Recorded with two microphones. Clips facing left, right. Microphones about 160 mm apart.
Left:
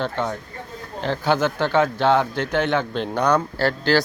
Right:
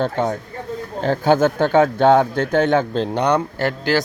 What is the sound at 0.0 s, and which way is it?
Speech, 45° right (ahead or behind).